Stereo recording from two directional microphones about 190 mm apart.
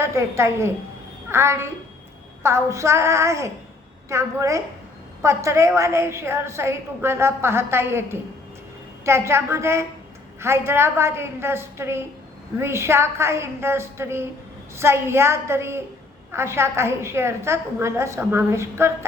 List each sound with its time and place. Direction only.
0.0 s a woman's voice: 15° right (ahead or behind)